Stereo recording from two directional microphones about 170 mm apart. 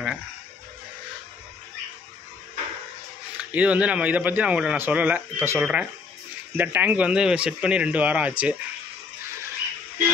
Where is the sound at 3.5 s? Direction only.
5° right (ahead or behind).